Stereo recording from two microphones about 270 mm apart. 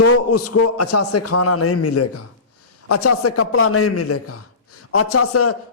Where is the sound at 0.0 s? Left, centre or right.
Left.